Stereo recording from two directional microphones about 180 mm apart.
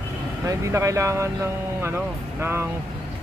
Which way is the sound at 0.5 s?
15° right (ahead or behind).